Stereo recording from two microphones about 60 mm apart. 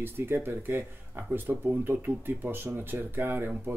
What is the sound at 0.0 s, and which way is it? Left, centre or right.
Speech, right.